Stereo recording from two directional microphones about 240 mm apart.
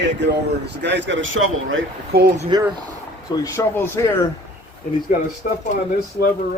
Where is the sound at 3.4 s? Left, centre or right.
Centre.